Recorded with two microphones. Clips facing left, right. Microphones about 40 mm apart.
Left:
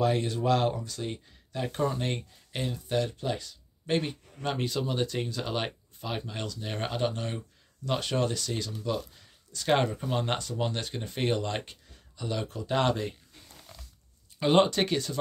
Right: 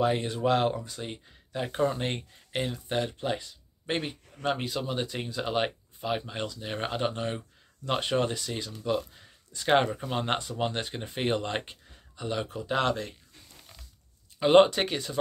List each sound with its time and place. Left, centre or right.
0.0 s speech: right
12.6 s speech: centre
14.4 s speech: centre